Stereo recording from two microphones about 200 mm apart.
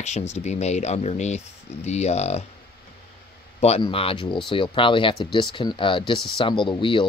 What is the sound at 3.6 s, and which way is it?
Speech, 30° left (ahead or behind).